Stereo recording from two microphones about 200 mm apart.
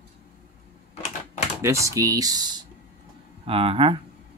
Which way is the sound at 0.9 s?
35° left (ahead or behind).